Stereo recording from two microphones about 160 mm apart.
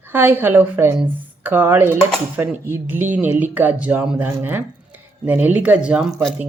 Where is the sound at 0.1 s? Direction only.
15° right (ahead or behind).